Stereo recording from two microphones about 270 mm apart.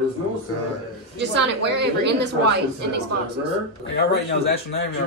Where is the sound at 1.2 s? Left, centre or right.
Right.